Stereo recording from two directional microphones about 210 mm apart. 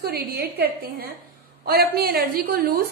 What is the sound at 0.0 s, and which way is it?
A woman's voice, 45° right (ahead or behind).